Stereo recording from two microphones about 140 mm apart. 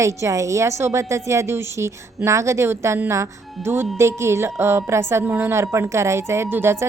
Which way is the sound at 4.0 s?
20° right (ahead or behind).